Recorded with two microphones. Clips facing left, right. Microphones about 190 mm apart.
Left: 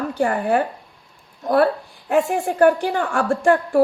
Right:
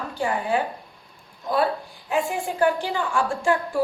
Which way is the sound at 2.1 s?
55° left (ahead or behind).